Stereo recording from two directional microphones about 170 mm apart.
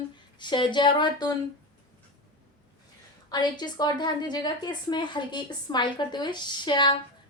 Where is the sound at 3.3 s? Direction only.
25° left (ahead or behind).